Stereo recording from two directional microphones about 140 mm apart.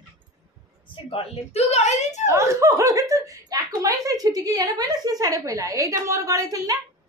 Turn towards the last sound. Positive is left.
turn(degrees=-25)  # may be behind; listen again after turning